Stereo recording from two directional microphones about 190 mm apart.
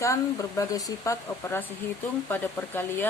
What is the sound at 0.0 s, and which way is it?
Speech, 15° left (ahead or behind).